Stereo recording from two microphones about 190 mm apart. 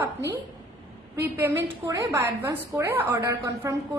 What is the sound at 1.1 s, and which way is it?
A woman's voice, 10° right (ahead or behind).